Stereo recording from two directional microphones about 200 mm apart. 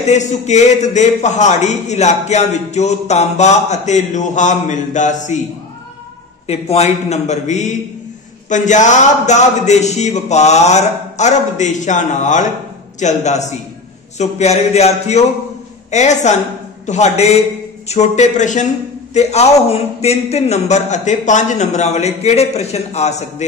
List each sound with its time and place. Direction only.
0.0 s a man's voice: 35° left (ahead or behind)
6.4 s a man's voice: 30° left (ahead or behind)